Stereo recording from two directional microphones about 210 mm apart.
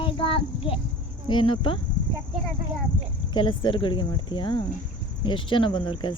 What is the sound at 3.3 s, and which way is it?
A child's voice, 20° left (ahead or behind).